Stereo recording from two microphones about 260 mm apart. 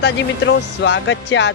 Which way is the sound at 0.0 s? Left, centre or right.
Left.